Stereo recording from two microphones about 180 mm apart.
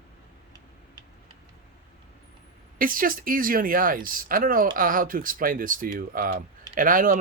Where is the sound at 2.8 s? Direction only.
50° right (ahead or behind).